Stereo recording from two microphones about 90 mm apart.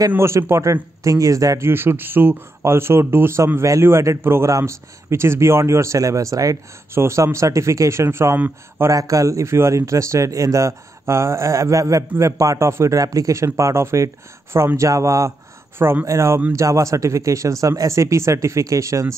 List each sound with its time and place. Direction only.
0.1 s speech: 30° right (ahead or behind)
1.7 s speech: 25° right (ahead or behind); by 6.6 s 40° right (ahead or behind)
6.9 s speech: 30° right (ahead or behind)
8.9 s speech: 40° right (ahead or behind)
15.8 s speech: 25° right (ahead or behind)